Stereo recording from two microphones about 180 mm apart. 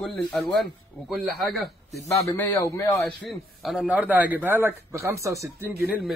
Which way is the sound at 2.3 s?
10° left (ahead or behind).